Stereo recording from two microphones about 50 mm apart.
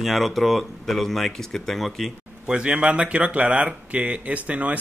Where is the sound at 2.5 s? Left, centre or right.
Right.